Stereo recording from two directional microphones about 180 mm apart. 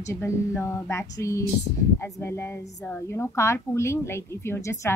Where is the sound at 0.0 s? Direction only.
15° left (ahead or behind).